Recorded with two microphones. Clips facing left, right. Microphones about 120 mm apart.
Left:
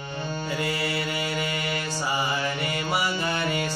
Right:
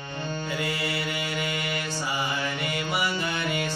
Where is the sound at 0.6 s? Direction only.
35° left (ahead or behind).